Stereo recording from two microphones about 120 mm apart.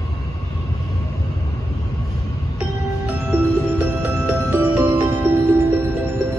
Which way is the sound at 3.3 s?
15° right (ahead or behind).